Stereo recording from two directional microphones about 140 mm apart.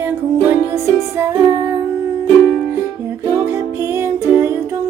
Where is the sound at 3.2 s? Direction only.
20° right (ahead or behind).